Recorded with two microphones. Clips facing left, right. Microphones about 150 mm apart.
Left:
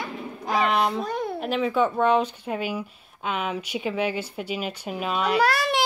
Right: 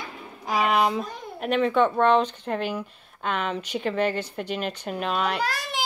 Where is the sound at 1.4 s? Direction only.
Centre (ahead or behind).